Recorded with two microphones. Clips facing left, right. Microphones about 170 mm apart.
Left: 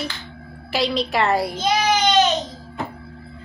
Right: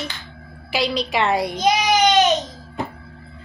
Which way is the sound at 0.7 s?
Centre (ahead or behind).